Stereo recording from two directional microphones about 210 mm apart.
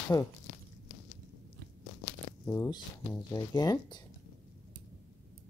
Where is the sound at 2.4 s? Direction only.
15° left (ahead or behind).